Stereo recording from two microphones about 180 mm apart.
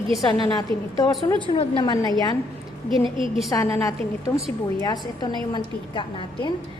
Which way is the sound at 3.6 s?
15° left (ahead or behind).